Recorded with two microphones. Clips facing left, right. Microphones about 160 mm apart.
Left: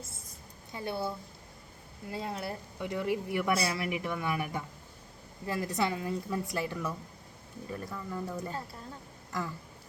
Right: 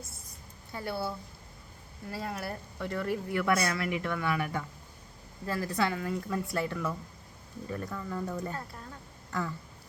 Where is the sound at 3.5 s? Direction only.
30° left (ahead or behind); by 8.4 s 10° left (ahead or behind).